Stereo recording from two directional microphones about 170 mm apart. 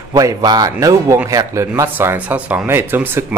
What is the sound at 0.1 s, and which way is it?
A man's voice, 20° right (ahead or behind).